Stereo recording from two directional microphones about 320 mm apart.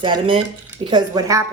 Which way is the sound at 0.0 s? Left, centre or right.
Centre.